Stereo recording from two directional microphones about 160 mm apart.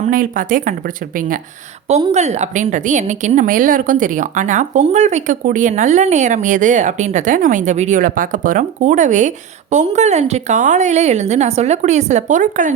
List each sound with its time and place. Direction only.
0.0 s speech: 55° right (ahead or behind)
1.9 s a woman's voice: 45° right (ahead or behind)